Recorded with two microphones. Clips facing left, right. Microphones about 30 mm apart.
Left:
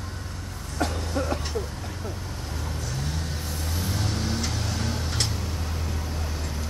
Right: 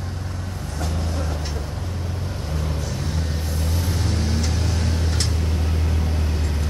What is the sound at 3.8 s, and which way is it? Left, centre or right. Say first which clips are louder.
Vehicle: right 1 dB; centre.